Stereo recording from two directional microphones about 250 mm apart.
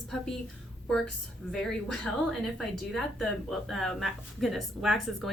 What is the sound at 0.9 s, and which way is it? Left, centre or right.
A woman's voice, centre.